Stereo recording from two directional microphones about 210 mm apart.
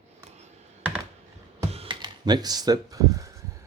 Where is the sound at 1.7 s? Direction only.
25° right (ahead or behind).